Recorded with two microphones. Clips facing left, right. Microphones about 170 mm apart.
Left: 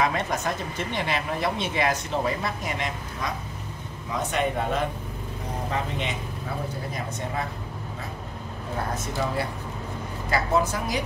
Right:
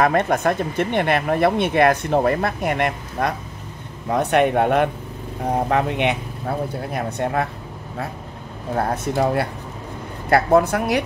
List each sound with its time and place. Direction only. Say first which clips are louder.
0.0 s speech: right 8 dB; 55° right (ahead or behind)
8.7 s speech: right 8 dB; 60° right (ahead or behind)